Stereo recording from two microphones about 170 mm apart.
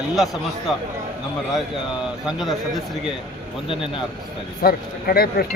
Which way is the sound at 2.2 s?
Centre (ahead or behind).